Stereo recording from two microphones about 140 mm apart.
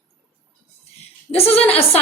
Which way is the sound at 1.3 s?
45° left (ahead or behind).